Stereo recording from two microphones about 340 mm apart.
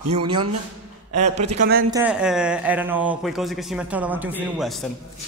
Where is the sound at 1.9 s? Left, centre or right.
Centre.